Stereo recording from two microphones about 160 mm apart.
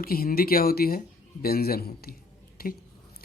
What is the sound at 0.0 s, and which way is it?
Speech, 65° left (ahead or behind).